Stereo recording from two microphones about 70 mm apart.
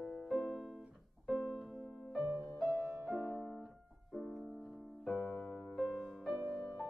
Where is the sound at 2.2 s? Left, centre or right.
Right.